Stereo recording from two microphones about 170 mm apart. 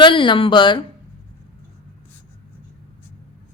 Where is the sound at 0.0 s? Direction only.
30° left (ahead or behind).